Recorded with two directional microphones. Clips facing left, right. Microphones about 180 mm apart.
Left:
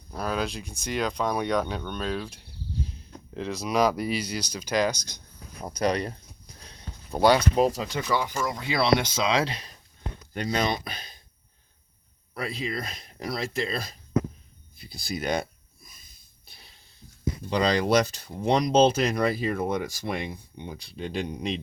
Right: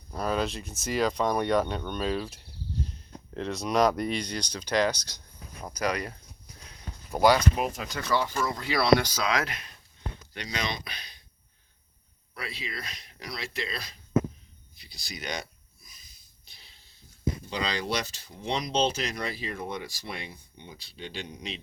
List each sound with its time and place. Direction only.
0.1 s speech: centre (ahead or behind)
5.7 s speech: 30° left (ahead or behind)
6.7 s a sound: 25° left (ahead or behind)
7.5 s speech: 30° left (ahead or behind)
7.9 s speech: 15° left (ahead or behind)
10.3 s speech: 50° left (ahead or behind)
12.3 s speech: 45° left (ahead or behind)
14.8 s a sound: 50° left (ahead or behind)
17.5 s speech: 55° left (ahead or behind)